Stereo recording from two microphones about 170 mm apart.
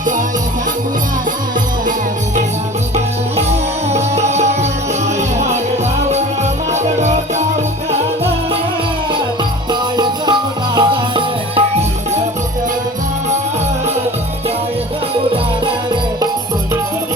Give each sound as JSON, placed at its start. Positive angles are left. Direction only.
{"t": 3.9, "sound": "music", "side_deg": -40}
{"t": 6.7, "sound": "music", "side_deg": -40}
{"t": 10.8, "sound": "music", "side_deg": -30}